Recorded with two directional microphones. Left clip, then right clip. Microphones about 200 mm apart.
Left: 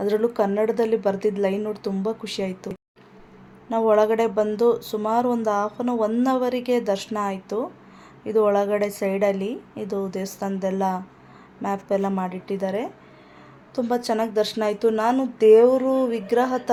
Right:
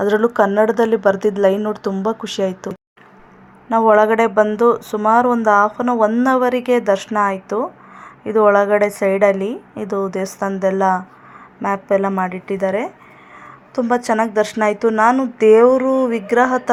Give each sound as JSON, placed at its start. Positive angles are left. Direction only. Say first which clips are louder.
{"t": 0.0, "sound": "speech", "louder": "right 7 dB", "side_deg": -20}
{"t": 3.7, "sound": "a woman's voice", "louder": "right 6 dB", "side_deg": -15}